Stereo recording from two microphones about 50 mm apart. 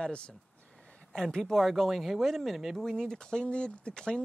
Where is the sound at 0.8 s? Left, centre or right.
Centre.